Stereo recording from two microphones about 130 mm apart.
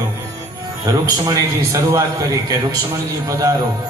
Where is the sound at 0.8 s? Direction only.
25° right (ahead or behind).